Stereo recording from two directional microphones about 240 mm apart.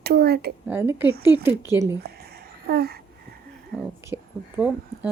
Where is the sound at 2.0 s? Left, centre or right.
Right.